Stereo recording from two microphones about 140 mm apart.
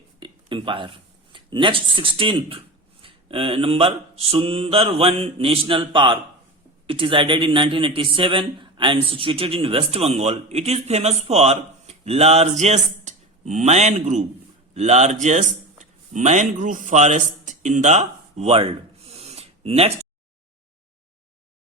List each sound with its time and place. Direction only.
0.2 s a man's voice: 35° right (ahead or behind)